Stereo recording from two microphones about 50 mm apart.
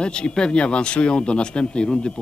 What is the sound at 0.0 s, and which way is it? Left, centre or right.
A man's voice, centre.